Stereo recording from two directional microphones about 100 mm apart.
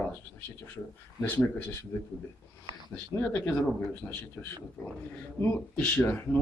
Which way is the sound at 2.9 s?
15° left (ahead or behind).